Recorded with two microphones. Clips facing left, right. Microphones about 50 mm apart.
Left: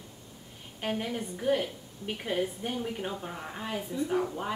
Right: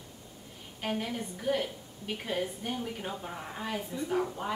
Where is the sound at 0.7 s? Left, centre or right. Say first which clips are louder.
Left 1 dB; centre.